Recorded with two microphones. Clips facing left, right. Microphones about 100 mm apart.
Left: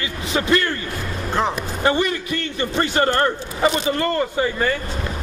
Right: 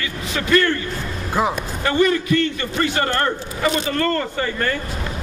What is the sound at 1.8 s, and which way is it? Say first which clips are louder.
A man's voice: right 3 dB; 25° left (ahead or behind).